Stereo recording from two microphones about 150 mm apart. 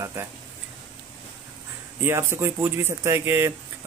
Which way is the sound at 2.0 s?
15° right (ahead or behind).